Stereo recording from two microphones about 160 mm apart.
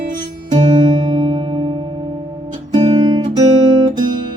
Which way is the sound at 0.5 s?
30° right (ahead or behind).